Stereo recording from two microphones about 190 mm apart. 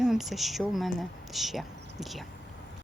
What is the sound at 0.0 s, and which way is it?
Speech, centre (ahead or behind).